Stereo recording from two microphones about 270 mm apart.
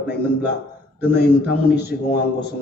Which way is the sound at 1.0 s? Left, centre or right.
Left.